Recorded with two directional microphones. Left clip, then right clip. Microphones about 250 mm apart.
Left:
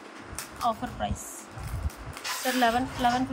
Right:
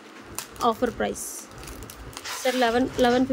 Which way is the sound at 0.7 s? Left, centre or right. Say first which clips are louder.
Right 6 dB; centre.